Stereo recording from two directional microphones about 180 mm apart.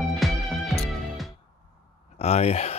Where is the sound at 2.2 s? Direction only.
35° left (ahead or behind).